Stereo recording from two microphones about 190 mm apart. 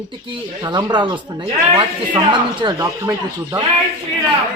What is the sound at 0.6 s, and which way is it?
Speech, 20° right (ahead or behind).